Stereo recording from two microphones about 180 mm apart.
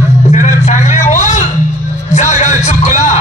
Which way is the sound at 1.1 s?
40° left (ahead or behind).